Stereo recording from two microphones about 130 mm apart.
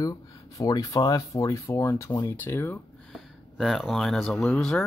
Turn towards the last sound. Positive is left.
turn(degrees=5)  # may be behind; listen again after turning